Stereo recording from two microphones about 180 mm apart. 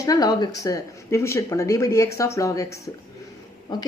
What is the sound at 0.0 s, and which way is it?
Speech, 20° left (ahead or behind).